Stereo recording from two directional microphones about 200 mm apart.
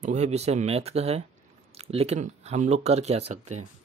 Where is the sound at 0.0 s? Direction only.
35° right (ahead or behind).